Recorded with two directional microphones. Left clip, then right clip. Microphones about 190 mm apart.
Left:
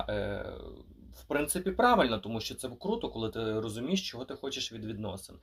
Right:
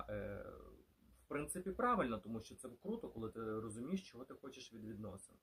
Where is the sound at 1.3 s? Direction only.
10° right (ahead or behind).